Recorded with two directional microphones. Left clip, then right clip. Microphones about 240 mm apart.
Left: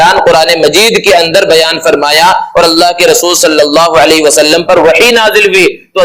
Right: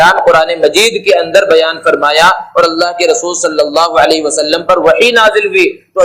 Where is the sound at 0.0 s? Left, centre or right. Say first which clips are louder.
Left 2 dB; left.